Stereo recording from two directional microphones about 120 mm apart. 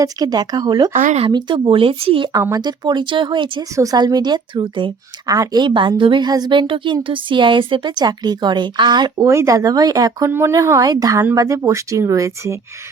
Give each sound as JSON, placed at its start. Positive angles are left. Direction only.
{"t": 0.0, "sound": "speech", "side_deg": -35}
{"t": 0.9, "sound": "speech", "side_deg": -90}
{"t": 1.3, "sound": "speech", "side_deg": -40}
{"t": 2.3, "sound": "speech", "side_deg": -30}
{"t": 9.2, "sound": "speech", "side_deg": -25}